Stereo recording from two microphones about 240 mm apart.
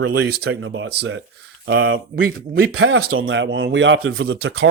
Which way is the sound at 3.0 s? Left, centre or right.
Right.